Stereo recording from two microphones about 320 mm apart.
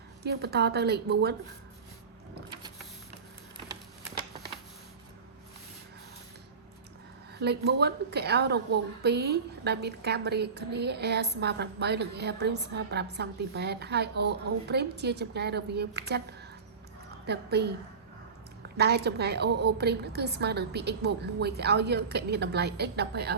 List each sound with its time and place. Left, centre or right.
0.2 s a woman's voice: right
7.3 s a woman's voice: right
17.2 s a woman's voice: right
18.8 s a woman's voice: right